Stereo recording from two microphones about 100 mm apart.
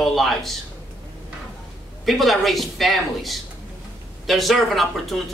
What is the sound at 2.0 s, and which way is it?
Speech, centre (ahead or behind).